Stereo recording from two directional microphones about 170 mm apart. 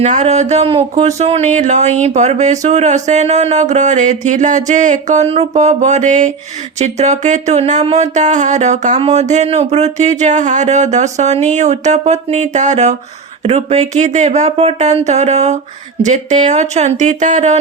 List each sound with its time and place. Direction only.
0.0 s speech: 40° right (ahead or behind)